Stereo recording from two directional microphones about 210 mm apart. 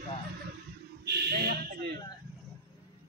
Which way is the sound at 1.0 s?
50° right (ahead or behind).